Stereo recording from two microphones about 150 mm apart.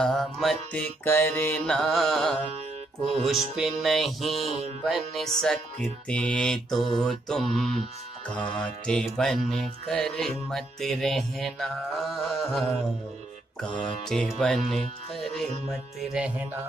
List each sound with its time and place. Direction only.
0.0 s music: centre (ahead or behind)
1.0 s mantra: 15° left (ahead or behind)
1.7 s music: 5° left (ahead or behind)
4.5 s music: 45° right (ahead or behind)
4.8 s music: centre (ahead or behind)
6.0 s mantra: 5° left (ahead or behind)
7.0 s music: 5° left (ahead or behind)
14.0 s music: 5° left (ahead or behind)